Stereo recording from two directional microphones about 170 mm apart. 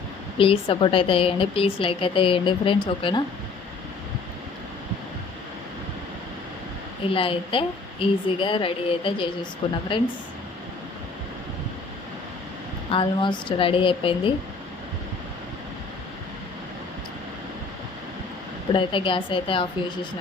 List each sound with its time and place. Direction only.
0.3 s a woman's voice: 35° left (ahead or behind)
7.1 s a woman's voice: 30° left (ahead or behind)
12.9 s a woman's voice: 30° left (ahead or behind)
18.7 s a woman's voice: 30° left (ahead or behind)